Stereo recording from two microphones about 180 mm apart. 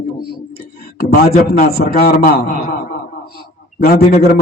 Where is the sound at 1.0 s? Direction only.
60° left (ahead or behind).